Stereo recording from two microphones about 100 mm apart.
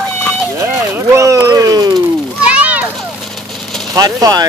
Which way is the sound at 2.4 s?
15° right (ahead or behind).